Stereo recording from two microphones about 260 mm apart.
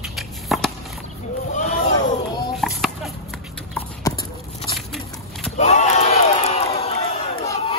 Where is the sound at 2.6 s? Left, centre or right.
Centre.